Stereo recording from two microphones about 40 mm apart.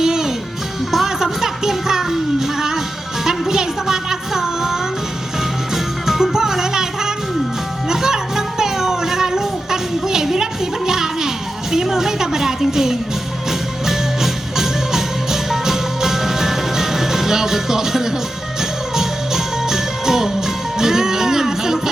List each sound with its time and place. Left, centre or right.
0.0 s music: centre
10.1 s a sound: centre
11.7 s music: centre